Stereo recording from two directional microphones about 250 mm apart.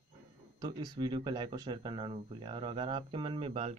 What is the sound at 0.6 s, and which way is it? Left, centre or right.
Speech, centre.